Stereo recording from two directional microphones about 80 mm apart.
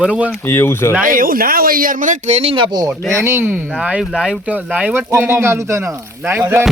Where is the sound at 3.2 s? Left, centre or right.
Right.